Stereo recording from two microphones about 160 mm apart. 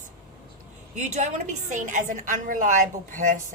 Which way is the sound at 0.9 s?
45° right (ahead or behind).